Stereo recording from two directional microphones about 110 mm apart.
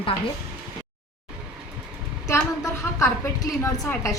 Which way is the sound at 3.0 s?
35° left (ahead or behind).